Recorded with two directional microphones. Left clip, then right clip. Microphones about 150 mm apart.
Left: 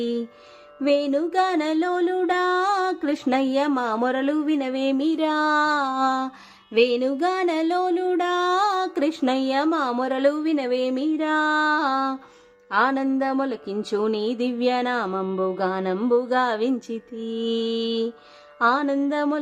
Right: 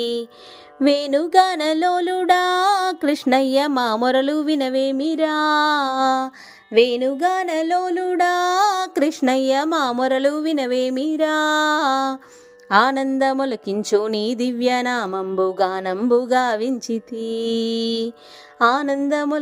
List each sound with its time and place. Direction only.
0.0 s music: 40° right (ahead or behind)
12.6 s speech: 35° right (ahead or behind)
13.1 s music: 30° right (ahead or behind)